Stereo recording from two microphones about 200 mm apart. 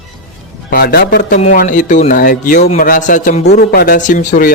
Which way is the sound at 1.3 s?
40° left (ahead or behind).